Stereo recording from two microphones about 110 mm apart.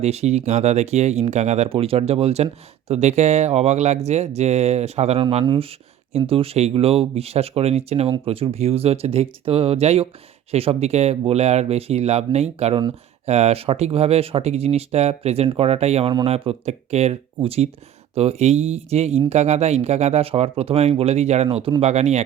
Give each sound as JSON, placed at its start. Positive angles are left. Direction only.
{"t": 0.0, "sound": "speech", "side_deg": -75}
{"t": 2.9, "sound": "speech", "side_deg": -85}
{"t": 5.4, "sound": "speech", "side_deg": -45}
{"t": 6.1, "sound": "speech", "side_deg": -60}
{"t": 8.2, "sound": "speech", "side_deg": -60}
{"t": 21.8, "sound": "speech", "side_deg": -80}